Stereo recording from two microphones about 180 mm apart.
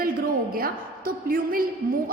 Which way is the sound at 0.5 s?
55° right (ahead or behind).